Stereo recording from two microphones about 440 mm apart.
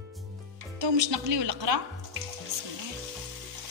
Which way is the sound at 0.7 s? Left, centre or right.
Right.